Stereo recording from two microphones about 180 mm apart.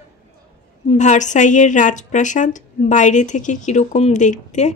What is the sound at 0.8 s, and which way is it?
A woman's voice, 40° left (ahead or behind).